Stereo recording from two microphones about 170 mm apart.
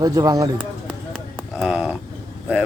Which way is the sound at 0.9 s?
Centre (ahead or behind).